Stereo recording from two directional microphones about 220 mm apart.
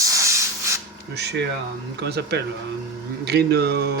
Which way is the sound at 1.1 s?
50° right (ahead or behind).